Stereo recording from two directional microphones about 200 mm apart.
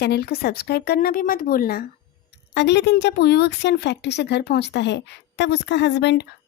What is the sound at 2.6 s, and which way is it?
A woman's voice, 60° left (ahead or behind).